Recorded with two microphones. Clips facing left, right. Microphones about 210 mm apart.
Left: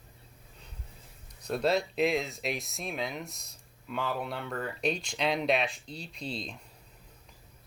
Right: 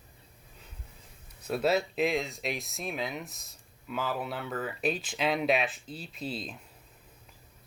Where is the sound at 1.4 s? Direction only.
5° right (ahead or behind).